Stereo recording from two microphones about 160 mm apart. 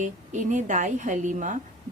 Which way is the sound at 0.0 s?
50° right (ahead or behind).